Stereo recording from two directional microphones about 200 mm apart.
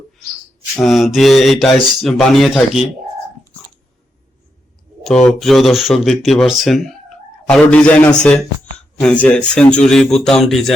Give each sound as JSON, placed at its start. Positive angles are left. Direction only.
{"t": 0.7, "sound": "speech", "side_deg": 0}
{"t": 5.0, "sound": "speech", "side_deg": 0}